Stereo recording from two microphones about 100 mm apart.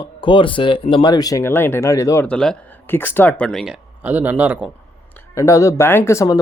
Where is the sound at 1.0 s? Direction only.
40° left (ahead or behind).